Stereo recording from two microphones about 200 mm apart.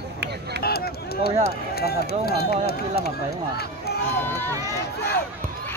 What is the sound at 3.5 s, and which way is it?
Run, 55° left (ahead or behind).